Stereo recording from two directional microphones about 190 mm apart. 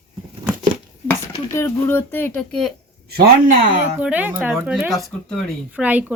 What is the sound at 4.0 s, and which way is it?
Speech, 10° right (ahead or behind).